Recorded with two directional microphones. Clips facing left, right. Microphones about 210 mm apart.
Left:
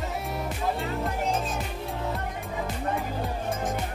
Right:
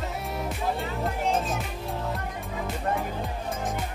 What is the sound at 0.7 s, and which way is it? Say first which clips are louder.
Music: even; centre (ahead or behind).